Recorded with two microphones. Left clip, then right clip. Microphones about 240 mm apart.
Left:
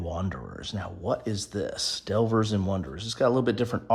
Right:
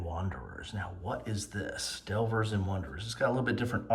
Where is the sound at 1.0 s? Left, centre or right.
Centre.